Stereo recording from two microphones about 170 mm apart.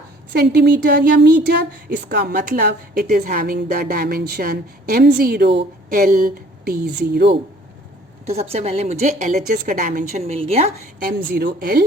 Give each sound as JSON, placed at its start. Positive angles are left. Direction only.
{"t": 0.3, "sound": "a woman's voice", "side_deg": -70}
{"t": 8.3, "sound": "a woman's voice", "side_deg": -35}
{"t": 11.0, "sound": "a woman's voice", "side_deg": -65}